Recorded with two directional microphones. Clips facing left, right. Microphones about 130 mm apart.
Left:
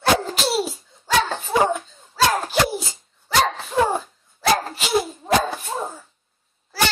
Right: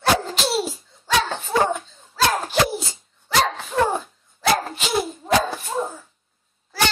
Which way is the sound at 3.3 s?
Centre (ahead or behind).